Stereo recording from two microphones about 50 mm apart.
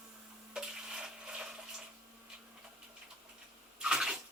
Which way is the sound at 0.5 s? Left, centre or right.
Centre.